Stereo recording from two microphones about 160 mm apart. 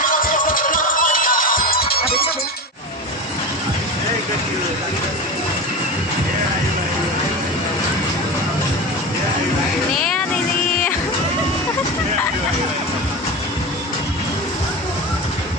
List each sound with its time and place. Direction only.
0.0 s music: 60° left (ahead or behind)
10.0 s vehicle: 5° left (ahead or behind)